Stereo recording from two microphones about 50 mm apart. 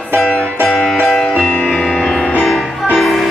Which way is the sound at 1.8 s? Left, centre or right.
Centre.